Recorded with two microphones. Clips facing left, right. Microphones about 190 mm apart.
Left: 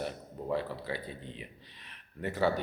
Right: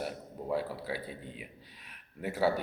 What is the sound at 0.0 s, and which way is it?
A man's voice, 5° right (ahead or behind).